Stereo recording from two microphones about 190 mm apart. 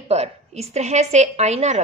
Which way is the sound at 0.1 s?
35° right (ahead or behind).